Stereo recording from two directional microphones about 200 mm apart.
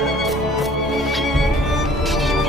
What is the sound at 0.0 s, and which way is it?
Music, centre (ahead or behind).